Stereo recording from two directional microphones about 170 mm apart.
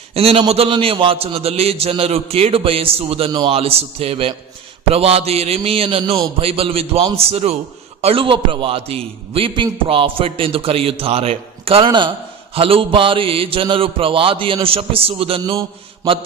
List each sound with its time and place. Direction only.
0.1 s a man's voice: 35° right (ahead or behind)